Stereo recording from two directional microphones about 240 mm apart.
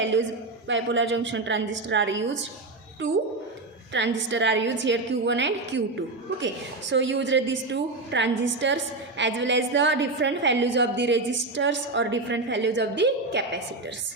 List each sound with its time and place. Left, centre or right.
0.0 s a sound: right
0.7 s a woman's voice: right
3.9 s a woman's voice: right
6.9 s a woman's voice: right